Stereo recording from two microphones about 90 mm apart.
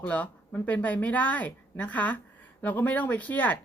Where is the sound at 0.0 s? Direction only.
15° left (ahead or behind).